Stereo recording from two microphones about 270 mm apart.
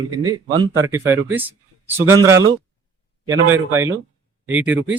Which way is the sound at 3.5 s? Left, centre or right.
Centre.